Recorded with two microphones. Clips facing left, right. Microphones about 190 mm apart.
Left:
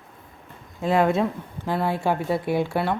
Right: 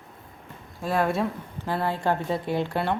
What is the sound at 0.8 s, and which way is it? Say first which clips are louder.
A woman's voice: left 4 dB; 15° left (ahead or behind).